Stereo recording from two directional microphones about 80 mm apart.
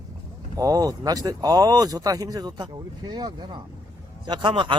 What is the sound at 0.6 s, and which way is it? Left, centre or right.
Speech, right.